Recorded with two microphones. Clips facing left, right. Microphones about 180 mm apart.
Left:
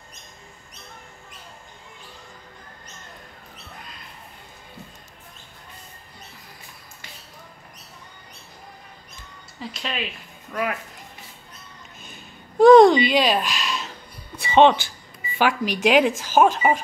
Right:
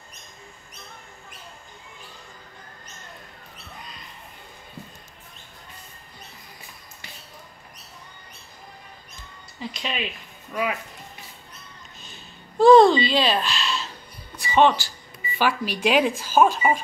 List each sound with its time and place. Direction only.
9.6 s speech: centre (ahead or behind)
12.0 s a sound: 15° left (ahead or behind)
14.3 s music: 20° left (ahead or behind)
15.3 s speech: 15° left (ahead or behind)